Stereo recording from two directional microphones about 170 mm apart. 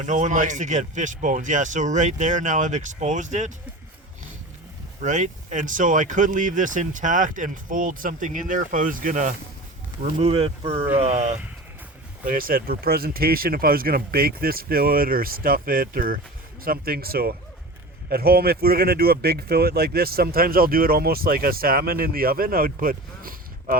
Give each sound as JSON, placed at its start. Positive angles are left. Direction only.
{"t": 0.0, "sound": "speech", "side_deg": -45}
{"t": 4.9, "sound": "speech", "side_deg": -45}
{"t": 10.0, "sound": "speech", "side_deg": -40}
{"t": 12.2, "sound": "speech", "side_deg": -55}